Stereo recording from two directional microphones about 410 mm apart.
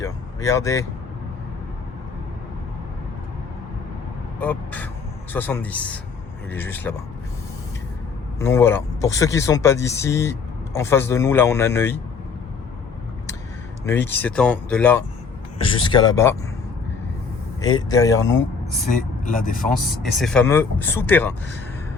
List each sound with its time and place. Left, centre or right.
0.0 s speech: centre
4.4 s speech: centre
8.4 s speech: centre
13.8 s speech: centre
17.6 s speech: centre
19.2 s speech: centre
19.7 s speech: centre